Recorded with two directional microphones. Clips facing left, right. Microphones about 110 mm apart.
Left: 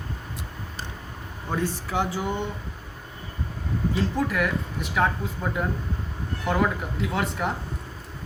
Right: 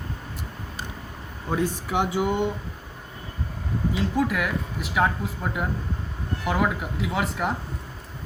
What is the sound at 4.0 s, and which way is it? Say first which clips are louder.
Speech: right 1 dB; 5° right (ahead or behind).